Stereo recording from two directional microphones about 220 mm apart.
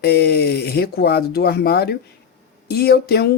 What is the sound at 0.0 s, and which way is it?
Speech, 45° left (ahead or behind).